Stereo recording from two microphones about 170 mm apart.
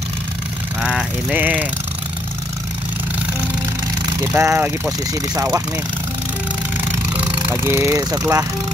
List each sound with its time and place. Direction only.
0.8 s vehicle: 5° right (ahead or behind)
4.3 s speech: 10° right (ahead or behind)
7.2 s speech: 15° right (ahead or behind)